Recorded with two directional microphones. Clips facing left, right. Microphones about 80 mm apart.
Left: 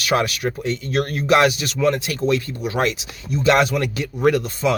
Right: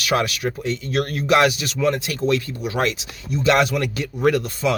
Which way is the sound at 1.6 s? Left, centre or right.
Left.